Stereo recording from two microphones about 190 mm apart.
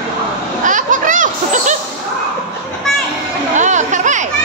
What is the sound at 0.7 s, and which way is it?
Speech, 40° right (ahead or behind).